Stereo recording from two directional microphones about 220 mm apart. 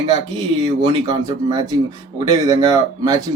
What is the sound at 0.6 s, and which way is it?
Speech, 20° right (ahead or behind).